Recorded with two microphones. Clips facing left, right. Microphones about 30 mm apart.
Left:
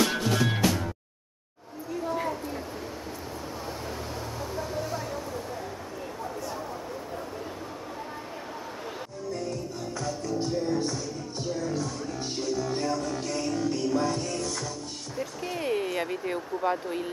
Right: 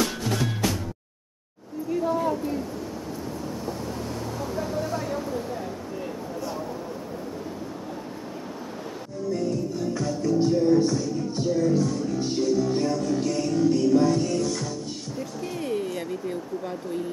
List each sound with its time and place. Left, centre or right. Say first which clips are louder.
0.1 s music: left 2 dB; left
4.6 s music: right 4 dB; centre
9.3 s music: right 7 dB; centre
15.1 s a sound: left 1 dB; centre